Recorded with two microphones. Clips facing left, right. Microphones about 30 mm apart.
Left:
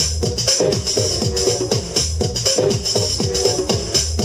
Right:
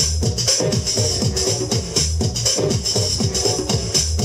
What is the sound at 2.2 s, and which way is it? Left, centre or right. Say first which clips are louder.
Music: left 5 dB; left.